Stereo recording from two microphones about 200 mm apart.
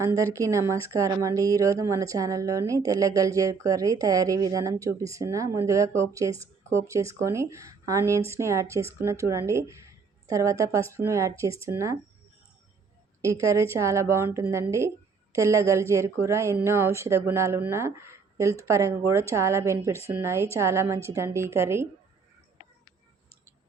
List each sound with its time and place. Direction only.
0.0 s speech: 15° right (ahead or behind)
13.2 s speech: 15° right (ahead or behind)